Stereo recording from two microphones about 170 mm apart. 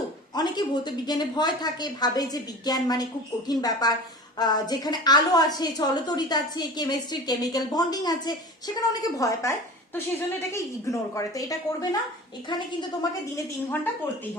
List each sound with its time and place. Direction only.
0.3 s a woman's voice: 25° left (ahead or behind)